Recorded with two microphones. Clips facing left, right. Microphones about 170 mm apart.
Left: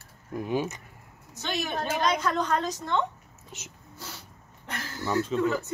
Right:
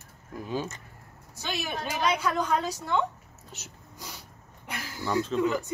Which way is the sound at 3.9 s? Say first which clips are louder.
Left 1 dB; 15° right (ahead or behind).